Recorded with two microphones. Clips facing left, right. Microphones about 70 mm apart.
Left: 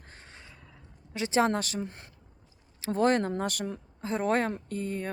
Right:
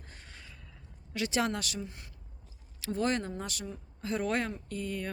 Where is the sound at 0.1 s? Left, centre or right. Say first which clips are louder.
Left 3 dB; left.